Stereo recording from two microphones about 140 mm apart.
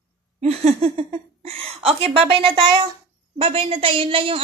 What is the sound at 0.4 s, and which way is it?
Speech, 50° right (ahead or behind).